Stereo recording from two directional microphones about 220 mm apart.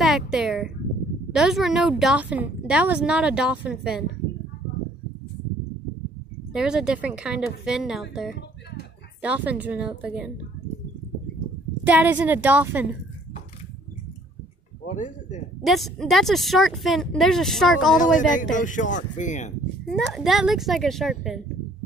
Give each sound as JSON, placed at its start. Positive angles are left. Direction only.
{"t": 0.0, "sound": "a sound", "side_deg": 0}
{"t": 1.3, "sound": "a woman's voice", "side_deg": 0}
{"t": 6.5, "sound": "a woman's voice", "side_deg": -5}
{"t": 9.2, "sound": "a woman's voice", "side_deg": -5}
{"t": 11.8, "sound": "a woman's voice", "side_deg": -5}
{"t": 14.9, "sound": "speech", "side_deg": 35}
{"t": 15.6, "sound": "a woman's voice", "side_deg": 0}
{"t": 18.1, "sound": "speech", "side_deg": 35}
{"t": 19.9, "sound": "a woman's voice", "side_deg": 0}